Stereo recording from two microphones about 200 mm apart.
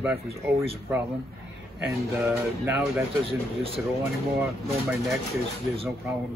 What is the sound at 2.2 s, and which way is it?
Speech, 10° right (ahead or behind).